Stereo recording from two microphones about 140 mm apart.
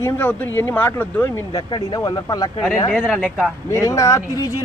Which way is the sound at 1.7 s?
30° left (ahead or behind).